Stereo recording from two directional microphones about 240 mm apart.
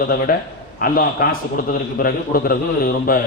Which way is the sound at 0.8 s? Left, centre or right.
Left.